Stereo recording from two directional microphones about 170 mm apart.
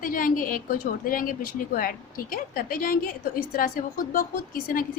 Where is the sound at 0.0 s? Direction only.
55° left (ahead or behind).